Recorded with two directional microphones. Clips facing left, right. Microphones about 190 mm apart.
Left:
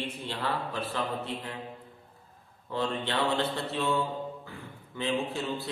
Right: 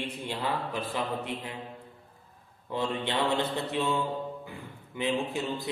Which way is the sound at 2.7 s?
15° right (ahead or behind).